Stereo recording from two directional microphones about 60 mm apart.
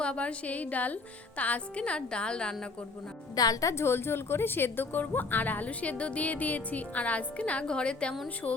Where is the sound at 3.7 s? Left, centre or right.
Left.